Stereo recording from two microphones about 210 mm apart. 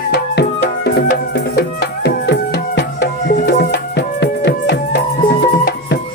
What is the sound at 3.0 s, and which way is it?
Music, 45° left (ahead or behind).